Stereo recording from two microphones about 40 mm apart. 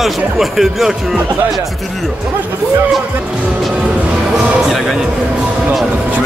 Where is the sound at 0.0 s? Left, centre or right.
Centre.